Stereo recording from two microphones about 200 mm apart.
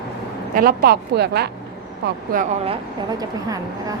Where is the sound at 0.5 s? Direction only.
45° right (ahead or behind).